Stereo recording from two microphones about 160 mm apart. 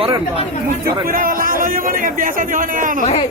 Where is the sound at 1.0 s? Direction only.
60° right (ahead or behind).